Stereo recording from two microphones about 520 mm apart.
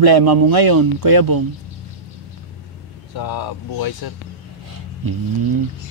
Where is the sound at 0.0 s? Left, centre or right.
Right.